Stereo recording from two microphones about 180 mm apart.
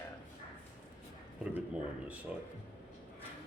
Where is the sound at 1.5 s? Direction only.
10° right (ahead or behind).